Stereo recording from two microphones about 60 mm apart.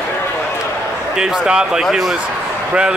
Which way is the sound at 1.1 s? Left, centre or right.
Centre.